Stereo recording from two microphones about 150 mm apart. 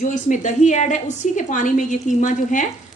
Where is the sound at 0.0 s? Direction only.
55° left (ahead or behind).